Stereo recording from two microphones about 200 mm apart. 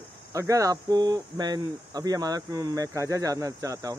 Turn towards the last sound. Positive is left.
turn(degrees=-15)  # may be behind; listen again after turning